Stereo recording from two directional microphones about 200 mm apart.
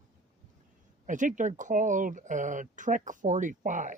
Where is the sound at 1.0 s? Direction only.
40° right (ahead or behind).